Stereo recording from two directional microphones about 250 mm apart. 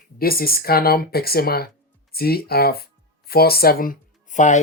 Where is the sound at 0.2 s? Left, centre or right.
Left.